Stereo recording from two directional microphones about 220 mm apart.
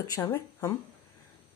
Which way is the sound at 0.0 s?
15° left (ahead or behind).